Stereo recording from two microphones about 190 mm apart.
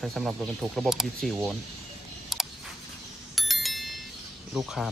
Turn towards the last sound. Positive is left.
turn(degrees=0)  # may be behind; listen again after turning